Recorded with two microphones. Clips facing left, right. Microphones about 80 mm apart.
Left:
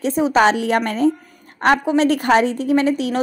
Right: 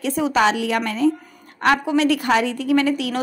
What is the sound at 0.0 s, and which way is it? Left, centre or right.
A woman's voice, left.